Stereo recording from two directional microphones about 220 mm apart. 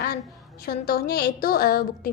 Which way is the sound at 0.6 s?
45° left (ahead or behind).